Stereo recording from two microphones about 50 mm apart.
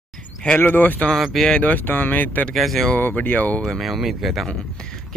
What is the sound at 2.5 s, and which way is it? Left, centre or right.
Speech, centre.